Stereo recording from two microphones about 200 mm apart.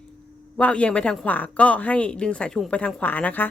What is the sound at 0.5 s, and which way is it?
Speech, 5° left (ahead or behind).